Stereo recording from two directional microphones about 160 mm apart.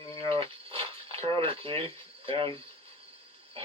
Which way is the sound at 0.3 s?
35° right (ahead or behind).